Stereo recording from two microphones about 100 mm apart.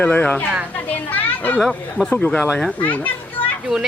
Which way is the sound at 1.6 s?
5° right (ahead or behind).